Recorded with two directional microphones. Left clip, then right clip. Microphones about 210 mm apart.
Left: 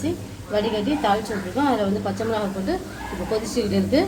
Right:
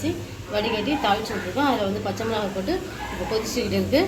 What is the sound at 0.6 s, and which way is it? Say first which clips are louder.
A woman's voice: left 1 dB; 35° left (ahead or behind).